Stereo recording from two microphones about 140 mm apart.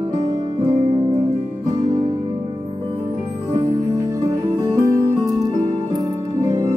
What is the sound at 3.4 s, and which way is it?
Music, 20° right (ahead or behind).